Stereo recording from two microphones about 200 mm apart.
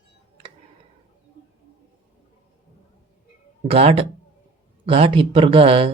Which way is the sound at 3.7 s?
30° right (ahead or behind).